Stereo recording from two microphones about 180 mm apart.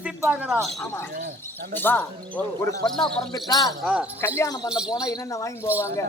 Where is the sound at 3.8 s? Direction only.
5° right (ahead or behind).